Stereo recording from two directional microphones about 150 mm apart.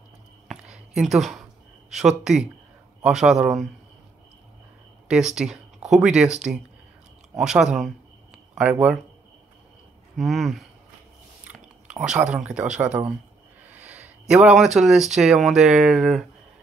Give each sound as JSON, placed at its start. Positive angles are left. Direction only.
{"t": 0.5, "sound": "a sound", "side_deg": -5}
{"t": 1.9, "sound": "speech", "side_deg": 0}
{"t": 5.0, "sound": "speech", "side_deg": -5}
{"t": 10.1, "sound": "speech", "side_deg": 0}
{"t": 13.7, "sound": "a sound", "side_deg": -10}
{"t": 14.8, "sound": "speech", "side_deg": 0}